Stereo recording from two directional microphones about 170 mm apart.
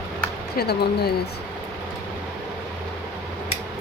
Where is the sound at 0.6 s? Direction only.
70° left (ahead or behind).